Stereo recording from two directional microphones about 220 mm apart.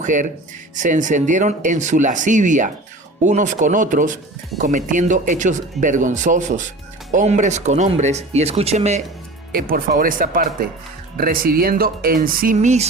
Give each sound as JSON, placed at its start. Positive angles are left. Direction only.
{"t": 0.0, "sound": "speech", "side_deg": -35}
{"t": 9.5, "sound": "speech", "side_deg": -40}